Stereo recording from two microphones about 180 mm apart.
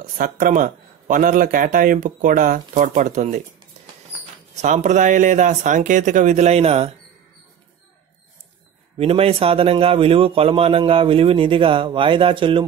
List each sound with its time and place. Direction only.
0.2 s a man's voice: 50° right (ahead or behind)
4.6 s a man's voice: 40° right (ahead or behind)
8.9 s speech: 35° right (ahead or behind)